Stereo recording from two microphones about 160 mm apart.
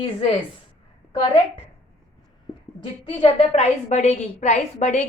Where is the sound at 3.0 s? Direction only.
30° left (ahead or behind).